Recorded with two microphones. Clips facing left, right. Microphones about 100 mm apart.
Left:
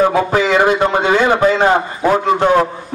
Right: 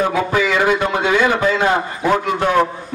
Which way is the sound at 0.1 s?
40° left (ahead or behind).